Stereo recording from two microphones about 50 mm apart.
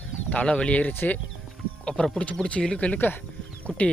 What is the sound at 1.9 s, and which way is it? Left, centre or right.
Speech, centre.